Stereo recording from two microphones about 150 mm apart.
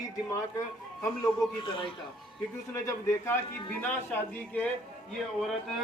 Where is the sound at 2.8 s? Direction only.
15° left (ahead or behind).